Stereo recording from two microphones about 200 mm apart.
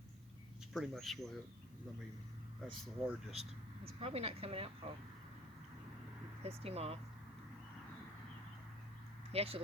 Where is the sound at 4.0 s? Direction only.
30° right (ahead or behind).